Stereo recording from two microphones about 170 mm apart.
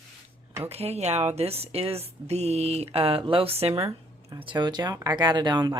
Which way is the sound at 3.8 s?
15° right (ahead or behind).